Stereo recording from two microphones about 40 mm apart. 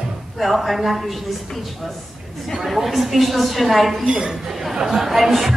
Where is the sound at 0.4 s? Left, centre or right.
Centre.